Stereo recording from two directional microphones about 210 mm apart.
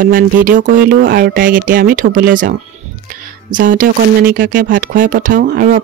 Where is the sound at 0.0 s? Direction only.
40° right (ahead or behind).